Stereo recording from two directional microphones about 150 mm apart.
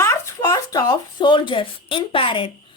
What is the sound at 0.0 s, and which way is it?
Speech, 20° left (ahead or behind).